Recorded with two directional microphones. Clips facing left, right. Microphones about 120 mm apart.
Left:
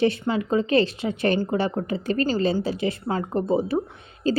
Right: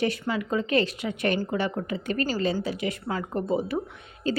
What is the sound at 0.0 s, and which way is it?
A woman's voice, 25° left (ahead or behind).